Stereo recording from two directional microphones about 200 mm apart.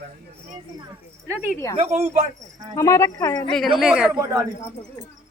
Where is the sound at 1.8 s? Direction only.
35° right (ahead or behind).